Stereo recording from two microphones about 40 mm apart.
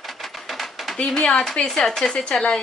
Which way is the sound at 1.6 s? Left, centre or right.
Centre.